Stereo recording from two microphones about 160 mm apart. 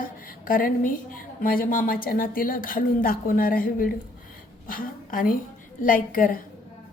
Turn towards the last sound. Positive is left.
turn(degrees=60)  # may be behind; listen again after turning